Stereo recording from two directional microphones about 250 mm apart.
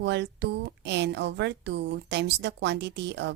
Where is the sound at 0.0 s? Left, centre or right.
Right.